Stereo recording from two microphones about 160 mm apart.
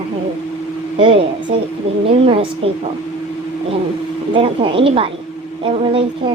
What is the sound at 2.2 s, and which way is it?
Speech, 35° right (ahead or behind).